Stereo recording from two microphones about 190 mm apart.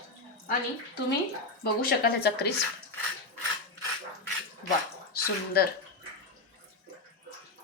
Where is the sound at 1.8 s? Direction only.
55° left (ahead or behind).